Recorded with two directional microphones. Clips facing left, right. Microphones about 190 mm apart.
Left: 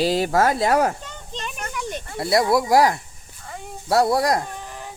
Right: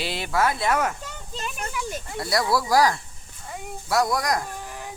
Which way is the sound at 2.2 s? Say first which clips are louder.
Left 5 dB; 25° left (ahead or behind).